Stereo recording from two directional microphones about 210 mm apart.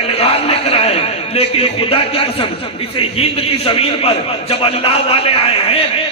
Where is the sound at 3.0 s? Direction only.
25° left (ahead or behind).